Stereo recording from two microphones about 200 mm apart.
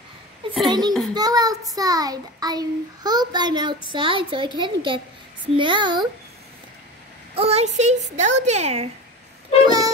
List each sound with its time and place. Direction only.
0.7 s a child's voice: 20° right (ahead or behind)
7.3 s speech: 30° right (ahead or behind)
9.7 s music: 20° right (ahead or behind)